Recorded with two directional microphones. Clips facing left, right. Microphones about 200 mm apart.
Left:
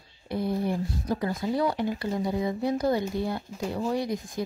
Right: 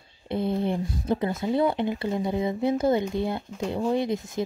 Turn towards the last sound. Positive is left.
turn(degrees=-25)  # may be behind; listen again after turning